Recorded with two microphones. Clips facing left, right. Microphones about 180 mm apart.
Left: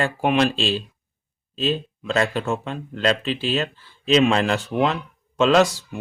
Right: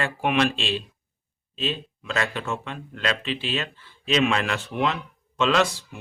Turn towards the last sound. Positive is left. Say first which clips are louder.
# left 5 dB
turn(degrees=40)  # may be behind; listen again after turning